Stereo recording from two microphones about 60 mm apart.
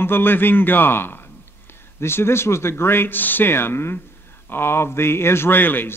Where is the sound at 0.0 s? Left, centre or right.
Left.